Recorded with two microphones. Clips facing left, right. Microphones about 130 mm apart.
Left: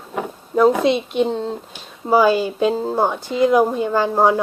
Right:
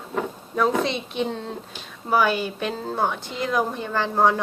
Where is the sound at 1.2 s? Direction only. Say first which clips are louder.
Left 5 dB; 35° left (ahead or behind).